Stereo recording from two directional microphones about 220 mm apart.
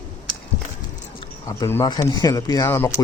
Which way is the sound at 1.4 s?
15° left (ahead or behind).